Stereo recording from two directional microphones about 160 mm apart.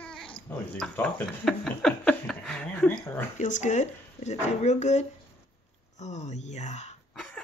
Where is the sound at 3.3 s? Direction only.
50° left (ahead or behind).